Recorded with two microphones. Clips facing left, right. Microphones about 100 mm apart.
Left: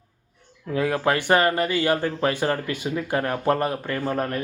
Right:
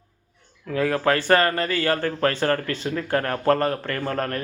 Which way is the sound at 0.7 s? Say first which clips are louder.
Right 1 dB; 20° left (ahead or behind).